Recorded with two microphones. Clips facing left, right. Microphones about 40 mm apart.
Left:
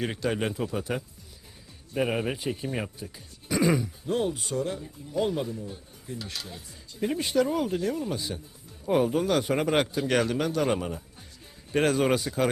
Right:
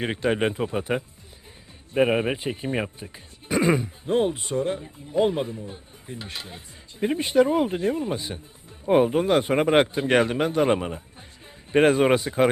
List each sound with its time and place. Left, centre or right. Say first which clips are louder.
0.0 s speech: right 5 dB; right